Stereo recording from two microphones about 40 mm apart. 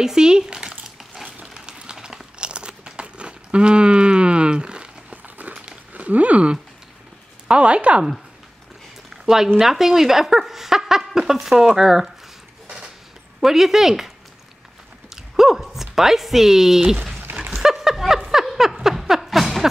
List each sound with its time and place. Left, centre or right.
0.0 s speech: centre
1.4 s a sound: centre
2.0 s crumpling: centre
2.3 s crunch: right
5.1 s crumpling: right
5.9 s speech: right
7.4 s a sound: right
9.1 s a sound: centre
9.6 s speech: centre
13.4 s speech: centre
15.3 s speech: centre
17.6 s a sound: centre